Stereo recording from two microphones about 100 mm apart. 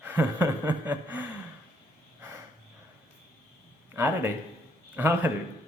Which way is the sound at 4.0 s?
25° right (ahead or behind).